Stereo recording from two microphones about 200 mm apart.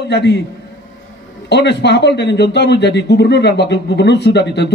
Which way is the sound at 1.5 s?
60° left (ahead or behind).